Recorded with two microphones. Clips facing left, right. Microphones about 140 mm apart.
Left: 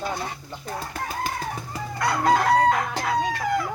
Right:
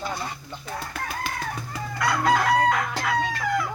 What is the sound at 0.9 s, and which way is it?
Chicken, 40° left (ahead or behind).